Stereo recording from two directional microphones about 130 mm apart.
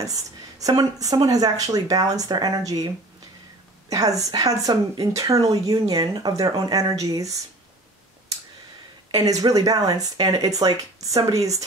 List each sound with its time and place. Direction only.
0.0 s speech: 25° right (ahead or behind)
3.9 s speech: 25° right (ahead or behind)
9.4 s speech: 30° right (ahead or behind)